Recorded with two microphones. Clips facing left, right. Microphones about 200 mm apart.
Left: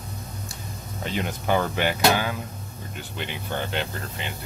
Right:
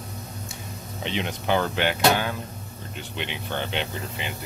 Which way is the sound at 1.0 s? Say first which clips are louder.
Even; 5° left (ahead or behind).